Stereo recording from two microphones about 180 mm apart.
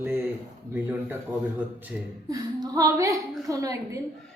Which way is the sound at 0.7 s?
10° right (ahead or behind).